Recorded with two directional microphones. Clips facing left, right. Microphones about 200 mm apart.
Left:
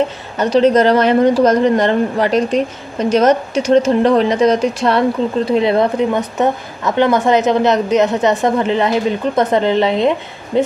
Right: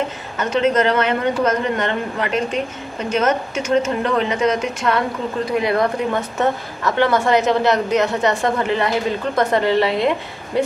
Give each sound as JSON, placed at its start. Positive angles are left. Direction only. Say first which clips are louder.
{"t": 0.4, "sound": "speech", "louder": "left 6 dB", "side_deg": 35}